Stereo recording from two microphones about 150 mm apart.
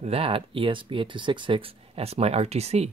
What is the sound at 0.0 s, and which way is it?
Speech, 40° right (ahead or behind).